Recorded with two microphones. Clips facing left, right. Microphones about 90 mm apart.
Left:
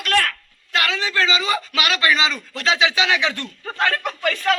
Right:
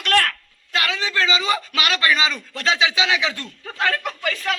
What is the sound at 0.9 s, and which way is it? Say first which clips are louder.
Speech: even; 20° right (ahead or behind).